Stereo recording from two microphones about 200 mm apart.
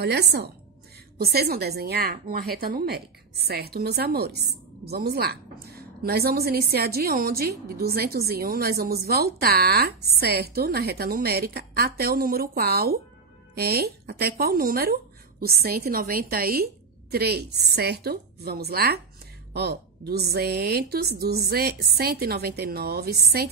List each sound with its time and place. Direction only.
0.0 s a woman's voice: 55° right (ahead or behind)